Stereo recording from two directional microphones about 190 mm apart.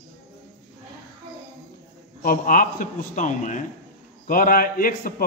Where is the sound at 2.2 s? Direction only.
45° left (ahead or behind).